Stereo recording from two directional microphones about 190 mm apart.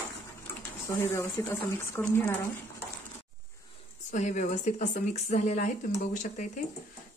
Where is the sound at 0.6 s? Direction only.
15° left (ahead or behind).